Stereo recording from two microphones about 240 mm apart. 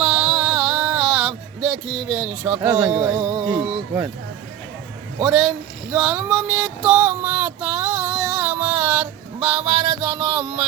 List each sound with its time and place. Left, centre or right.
0.0 s music: centre
3.2 s music: right
3.4 s speech: centre
5.2 s a sound: centre